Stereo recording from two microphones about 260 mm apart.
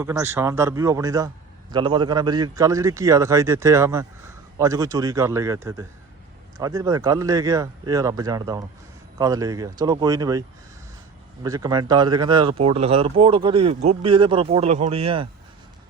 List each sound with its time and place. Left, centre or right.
0.0 s a man's voice: centre
11.4 s speech: centre